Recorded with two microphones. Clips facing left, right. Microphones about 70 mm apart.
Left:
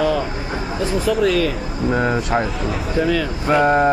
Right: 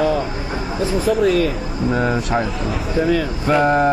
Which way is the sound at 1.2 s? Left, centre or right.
Left.